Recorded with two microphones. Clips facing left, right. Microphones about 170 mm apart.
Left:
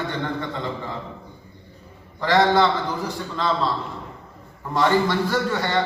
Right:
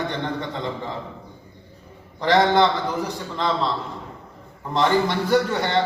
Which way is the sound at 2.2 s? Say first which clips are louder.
Right 1 dB; 20° right (ahead or behind).